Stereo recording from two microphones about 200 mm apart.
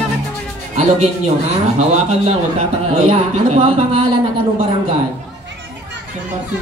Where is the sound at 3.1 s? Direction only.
25° right (ahead or behind).